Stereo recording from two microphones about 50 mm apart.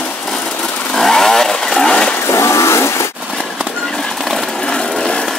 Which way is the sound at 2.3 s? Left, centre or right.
Left.